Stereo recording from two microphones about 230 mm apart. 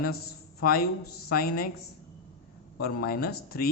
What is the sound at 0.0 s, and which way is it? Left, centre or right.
A man's voice, left.